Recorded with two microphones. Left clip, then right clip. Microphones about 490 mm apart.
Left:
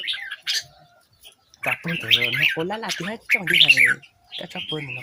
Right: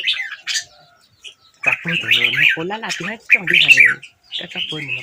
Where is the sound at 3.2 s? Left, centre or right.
Left.